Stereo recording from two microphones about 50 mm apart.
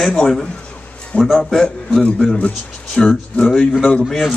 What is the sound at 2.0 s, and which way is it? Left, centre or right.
Speech, left.